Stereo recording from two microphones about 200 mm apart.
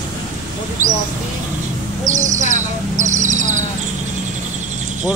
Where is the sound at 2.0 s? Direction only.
40° right (ahead or behind).